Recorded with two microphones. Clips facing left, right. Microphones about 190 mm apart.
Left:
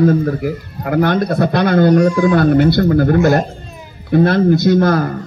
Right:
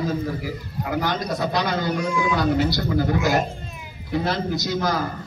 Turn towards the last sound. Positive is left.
turn(degrees=60)  # may be behind; listen again after turning